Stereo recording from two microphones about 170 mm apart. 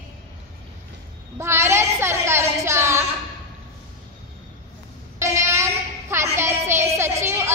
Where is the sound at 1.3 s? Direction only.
15° right (ahead or behind).